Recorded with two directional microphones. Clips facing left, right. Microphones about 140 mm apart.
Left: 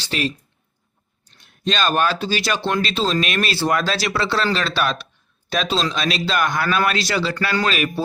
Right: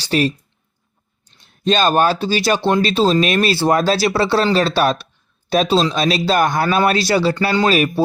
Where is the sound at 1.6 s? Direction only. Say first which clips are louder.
Right 5 dB; 35° right (ahead or behind).